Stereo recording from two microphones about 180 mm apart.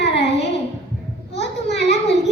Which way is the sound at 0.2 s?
70° left (ahead or behind).